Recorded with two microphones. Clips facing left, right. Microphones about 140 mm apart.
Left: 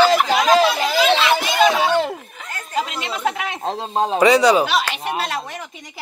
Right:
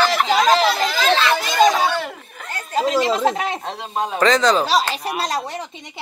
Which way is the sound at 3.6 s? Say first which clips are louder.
Left 4 dB; 30° left (ahead or behind).